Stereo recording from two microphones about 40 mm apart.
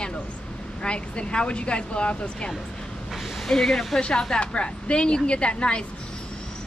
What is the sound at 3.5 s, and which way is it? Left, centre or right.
Speech, centre.